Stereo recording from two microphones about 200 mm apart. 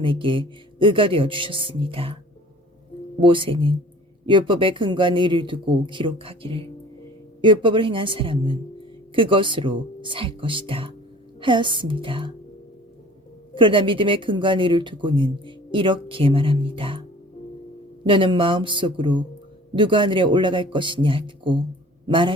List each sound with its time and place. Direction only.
0.0 s speech: 25° right (ahead or behind)
3.2 s speech: 25° right (ahead or behind)
13.5 s speech: 25° right (ahead or behind)
18.0 s a man's voice: 25° right (ahead or behind)